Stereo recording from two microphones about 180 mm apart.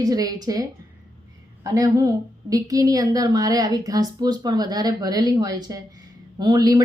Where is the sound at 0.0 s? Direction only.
20° right (ahead or behind).